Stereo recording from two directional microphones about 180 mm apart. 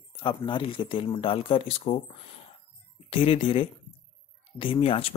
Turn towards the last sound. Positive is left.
turn(degrees=35)  # may be behind; listen again after turning